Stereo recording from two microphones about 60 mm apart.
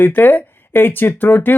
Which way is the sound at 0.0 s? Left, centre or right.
Left.